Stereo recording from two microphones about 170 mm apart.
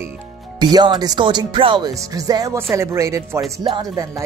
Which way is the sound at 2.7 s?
15° right (ahead or behind).